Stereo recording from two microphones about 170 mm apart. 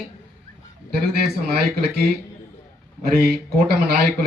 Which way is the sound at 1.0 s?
70° right (ahead or behind).